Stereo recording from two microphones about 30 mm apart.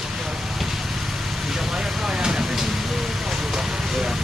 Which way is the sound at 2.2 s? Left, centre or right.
Right.